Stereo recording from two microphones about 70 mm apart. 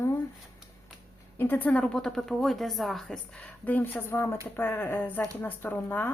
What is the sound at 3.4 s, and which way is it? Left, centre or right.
Speech, left.